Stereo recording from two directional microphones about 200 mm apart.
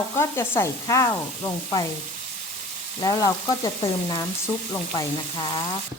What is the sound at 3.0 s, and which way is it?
Frying, 20° left (ahead or behind).